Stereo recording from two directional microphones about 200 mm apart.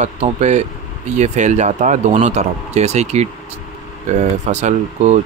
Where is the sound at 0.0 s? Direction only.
35° right (ahead or behind).